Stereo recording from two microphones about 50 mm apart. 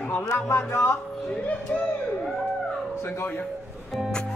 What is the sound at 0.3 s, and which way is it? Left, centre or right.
Speech, left.